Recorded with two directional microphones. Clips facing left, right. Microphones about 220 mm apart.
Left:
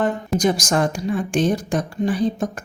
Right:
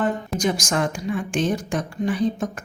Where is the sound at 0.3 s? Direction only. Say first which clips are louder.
Left 6 dB; 35° left (ahead or behind).